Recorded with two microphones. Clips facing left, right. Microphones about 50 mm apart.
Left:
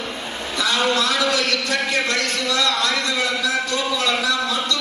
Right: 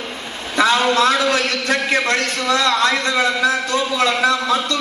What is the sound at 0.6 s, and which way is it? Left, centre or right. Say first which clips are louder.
A man's voice: right 5 dB; right.